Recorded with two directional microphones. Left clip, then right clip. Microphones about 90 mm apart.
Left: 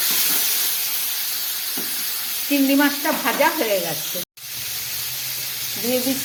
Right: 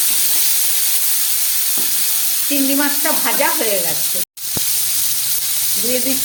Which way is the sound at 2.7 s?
20° right (ahead or behind).